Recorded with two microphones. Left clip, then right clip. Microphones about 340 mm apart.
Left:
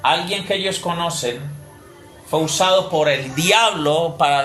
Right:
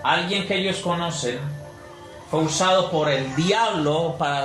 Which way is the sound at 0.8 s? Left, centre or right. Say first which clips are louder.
Left 2 dB; left.